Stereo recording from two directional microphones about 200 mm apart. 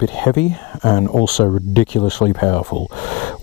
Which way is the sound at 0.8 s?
25° left (ahead or behind).